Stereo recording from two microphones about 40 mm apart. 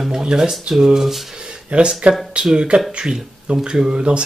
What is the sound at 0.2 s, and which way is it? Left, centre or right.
Speech, centre.